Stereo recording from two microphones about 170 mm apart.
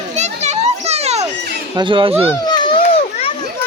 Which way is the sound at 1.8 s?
30° right (ahead or behind).